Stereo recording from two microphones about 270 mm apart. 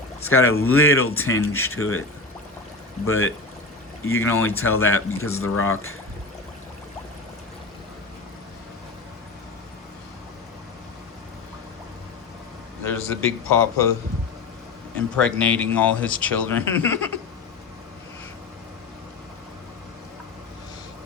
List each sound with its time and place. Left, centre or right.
0.2 s speech: left
3.1 s speech: left
12.8 s a man's voice: centre
14.9 s speech: centre